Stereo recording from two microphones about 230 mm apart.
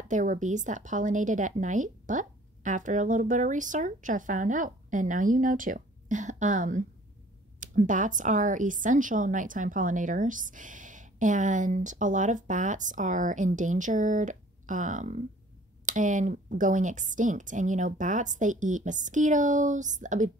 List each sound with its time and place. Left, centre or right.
0.1 s a woman's voice: right